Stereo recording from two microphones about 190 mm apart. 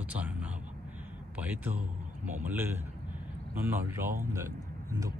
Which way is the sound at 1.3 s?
10° right (ahead or behind).